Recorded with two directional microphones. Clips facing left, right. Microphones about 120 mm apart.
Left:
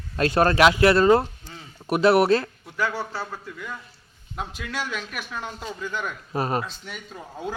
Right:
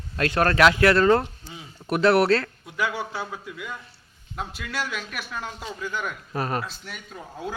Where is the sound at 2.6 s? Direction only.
10° right (ahead or behind).